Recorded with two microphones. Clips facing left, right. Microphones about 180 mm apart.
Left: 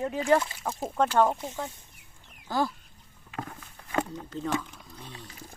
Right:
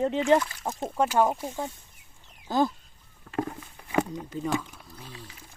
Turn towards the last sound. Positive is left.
turn(degrees=-5)  # may be behind; listen again after turning